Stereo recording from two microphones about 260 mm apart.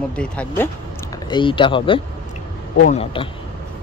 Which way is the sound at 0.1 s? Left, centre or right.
Centre.